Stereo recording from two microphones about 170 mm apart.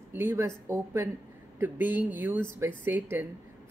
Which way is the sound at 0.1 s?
15° right (ahead or behind).